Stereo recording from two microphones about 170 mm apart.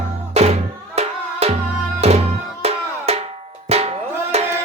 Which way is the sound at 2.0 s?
35° right (ahead or behind).